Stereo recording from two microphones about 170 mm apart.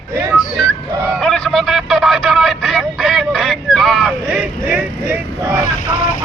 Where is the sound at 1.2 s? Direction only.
5° left (ahead or behind).